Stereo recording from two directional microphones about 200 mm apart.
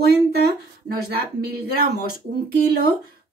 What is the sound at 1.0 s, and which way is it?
A woman's voice, 50° right (ahead or behind).